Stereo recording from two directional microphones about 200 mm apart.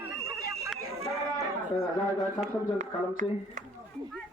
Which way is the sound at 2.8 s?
40° right (ahead or behind).